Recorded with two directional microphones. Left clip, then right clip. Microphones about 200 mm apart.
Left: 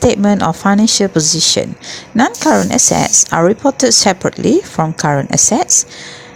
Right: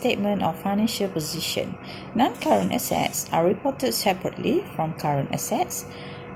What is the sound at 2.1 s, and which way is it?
A woman's voice, 55° left (ahead or behind).